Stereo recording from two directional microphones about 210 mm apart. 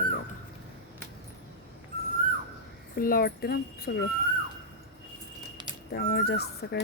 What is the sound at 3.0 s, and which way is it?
Speech, 45° left (ahead or behind).